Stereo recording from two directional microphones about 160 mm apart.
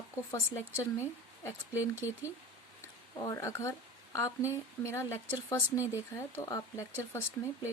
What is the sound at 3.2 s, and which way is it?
A woman's voice, 20° left (ahead or behind).